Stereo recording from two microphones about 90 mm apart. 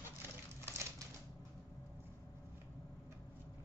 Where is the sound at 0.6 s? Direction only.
30° right (ahead or behind).